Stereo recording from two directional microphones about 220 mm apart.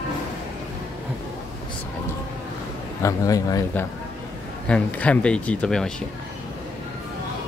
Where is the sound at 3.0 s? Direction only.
15° left (ahead or behind).